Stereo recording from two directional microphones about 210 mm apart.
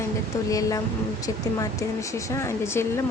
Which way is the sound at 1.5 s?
15° left (ahead or behind).